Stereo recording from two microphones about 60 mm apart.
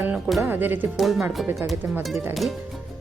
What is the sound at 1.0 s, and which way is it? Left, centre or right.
Music, centre.